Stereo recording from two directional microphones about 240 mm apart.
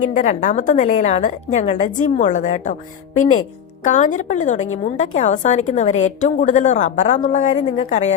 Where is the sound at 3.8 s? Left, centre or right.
Left.